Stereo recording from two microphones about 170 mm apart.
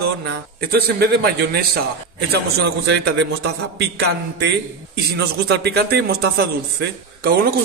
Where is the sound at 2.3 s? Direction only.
70° right (ahead or behind).